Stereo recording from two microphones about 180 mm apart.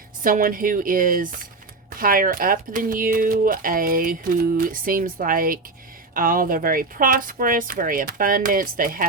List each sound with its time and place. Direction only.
0.2 s speech: 50° right (ahead or behind)